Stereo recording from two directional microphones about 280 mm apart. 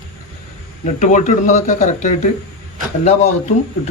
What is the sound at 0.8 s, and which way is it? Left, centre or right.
A man's voice, left.